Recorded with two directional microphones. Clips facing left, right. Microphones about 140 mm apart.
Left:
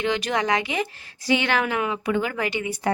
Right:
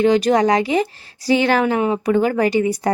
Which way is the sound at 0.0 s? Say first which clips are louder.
Right 10 dB; 40° right (ahead or behind).